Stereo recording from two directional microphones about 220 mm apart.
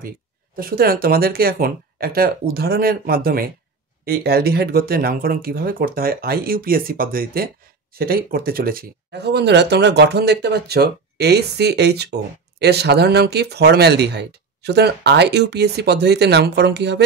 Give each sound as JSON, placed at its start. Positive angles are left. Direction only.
{"t": 0.6, "sound": "speech", "side_deg": -45}